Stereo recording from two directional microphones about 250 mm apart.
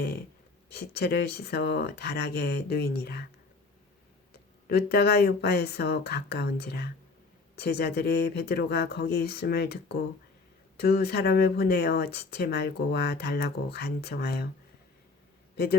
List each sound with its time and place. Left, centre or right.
0.7 s speech: left
4.7 s speech: left
15.5 s a man's voice: left